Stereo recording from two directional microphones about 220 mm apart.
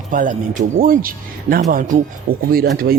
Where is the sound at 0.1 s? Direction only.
35° right (ahead or behind).